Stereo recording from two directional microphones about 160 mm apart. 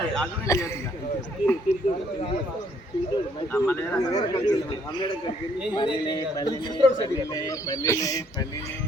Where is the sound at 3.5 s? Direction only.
15° left (ahead or behind).